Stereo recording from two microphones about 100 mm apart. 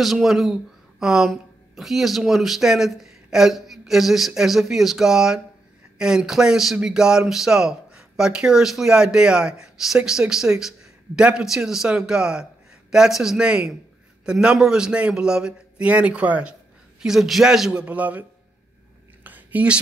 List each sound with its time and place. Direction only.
0.0 s speech: centre (ahead or behind)
17.8 s speech: 15° right (ahead or behind)
19.2 s a sound: 15° right (ahead or behind)